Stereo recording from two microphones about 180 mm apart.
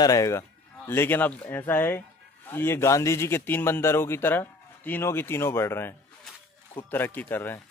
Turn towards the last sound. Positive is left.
turn(degrees=10)  # may be behind; listen again after turning